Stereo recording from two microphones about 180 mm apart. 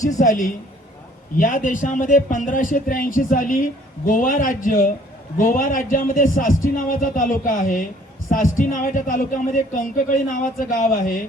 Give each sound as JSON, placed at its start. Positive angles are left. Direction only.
{"t": 0.2, "sound": "speech", "side_deg": 45}